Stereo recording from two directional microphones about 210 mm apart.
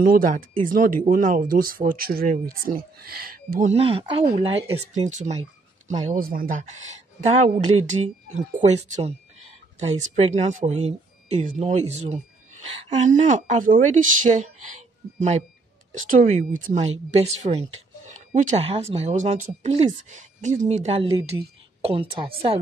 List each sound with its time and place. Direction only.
0.0 s a woman's voice: 40° right (ahead or behind); by 22.3 s 25° right (ahead or behind)